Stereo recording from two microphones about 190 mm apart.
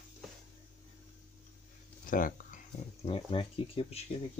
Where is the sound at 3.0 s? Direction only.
30° left (ahead or behind).